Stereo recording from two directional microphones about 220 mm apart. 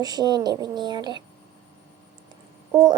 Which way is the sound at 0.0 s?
20° right (ahead or behind).